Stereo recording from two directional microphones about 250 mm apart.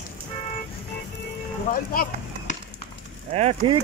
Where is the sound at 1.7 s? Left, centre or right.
Left.